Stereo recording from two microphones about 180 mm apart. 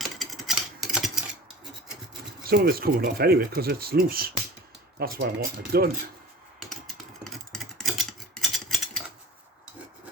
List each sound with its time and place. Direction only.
0.0 s engine: centre (ahead or behind)
2.4 s speech: 60° right (ahead or behind)
7.5 s a sound: centre (ahead or behind)